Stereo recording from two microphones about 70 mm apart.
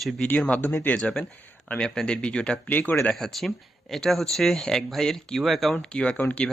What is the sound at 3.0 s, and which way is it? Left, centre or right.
Speech, centre.